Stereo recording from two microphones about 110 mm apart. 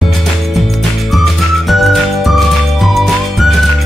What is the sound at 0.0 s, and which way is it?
Music, centre (ahead or behind).